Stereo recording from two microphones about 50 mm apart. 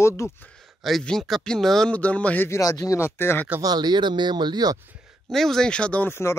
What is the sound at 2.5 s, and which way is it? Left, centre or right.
Speech, left.